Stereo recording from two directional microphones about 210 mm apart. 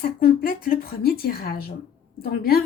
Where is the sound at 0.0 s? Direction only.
45° left (ahead or behind).